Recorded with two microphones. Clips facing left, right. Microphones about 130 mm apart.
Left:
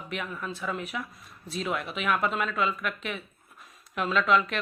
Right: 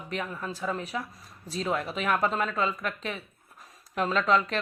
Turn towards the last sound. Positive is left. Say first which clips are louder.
# even
turn(degrees=-35)  # may be behind; listen again after turning